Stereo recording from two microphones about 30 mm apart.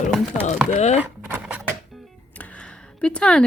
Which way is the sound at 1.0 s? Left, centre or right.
Right.